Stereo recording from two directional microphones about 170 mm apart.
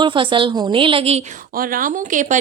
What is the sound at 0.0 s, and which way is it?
A woman's voice, 30° right (ahead or behind).